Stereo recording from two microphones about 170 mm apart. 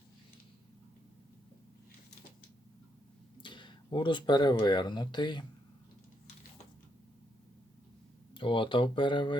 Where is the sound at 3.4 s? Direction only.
30° left (ahead or behind).